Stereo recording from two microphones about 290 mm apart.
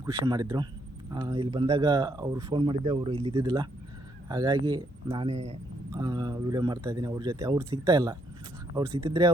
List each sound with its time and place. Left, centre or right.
0.0 s speech: centre